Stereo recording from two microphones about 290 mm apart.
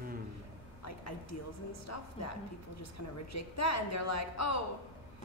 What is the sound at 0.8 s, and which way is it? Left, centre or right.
A man's voice, left.